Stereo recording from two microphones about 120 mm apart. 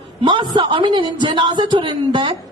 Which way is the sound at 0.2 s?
40° right (ahead or behind).